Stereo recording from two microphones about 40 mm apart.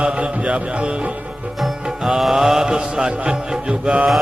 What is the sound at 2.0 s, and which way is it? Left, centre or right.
Music, centre.